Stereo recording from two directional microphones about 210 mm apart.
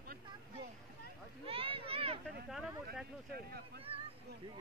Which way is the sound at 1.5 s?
25° right (ahead or behind).